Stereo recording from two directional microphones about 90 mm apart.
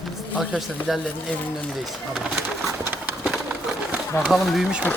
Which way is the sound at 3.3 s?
10° right (ahead or behind).